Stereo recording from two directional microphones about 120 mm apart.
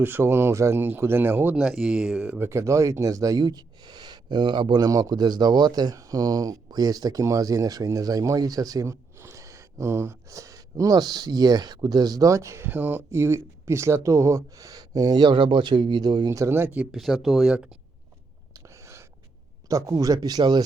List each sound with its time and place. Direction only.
0.0 s speech: 20° right (ahead or behind)
1.5 s speech: 5° right (ahead or behind)
2.5 s speech: 25° right (ahead or behind); by 4.9 s 40° right (ahead or behind)
4.9 s speech: 30° right (ahead or behind)
16.9 s speech: centre (ahead or behind)
18.5 s a sound: 25° right (ahead or behind)
19.6 s speech: 25° right (ahead or behind)